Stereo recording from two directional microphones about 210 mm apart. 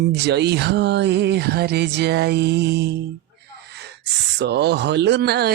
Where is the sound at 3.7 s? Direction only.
55° right (ahead or behind).